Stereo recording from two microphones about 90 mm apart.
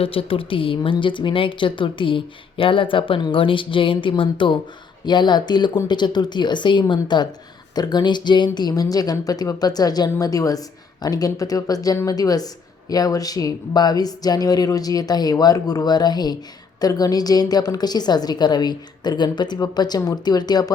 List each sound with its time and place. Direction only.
0.0 s a woman's voice: 90° left
0.9 s speech: 65° left (ahead or behind)
5.0 s a woman's voice: 55° left (ahead or behind)